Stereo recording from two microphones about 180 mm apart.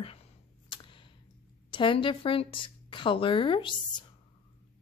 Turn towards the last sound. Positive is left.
turn(degrees=30)  # may be behind; listen again after turning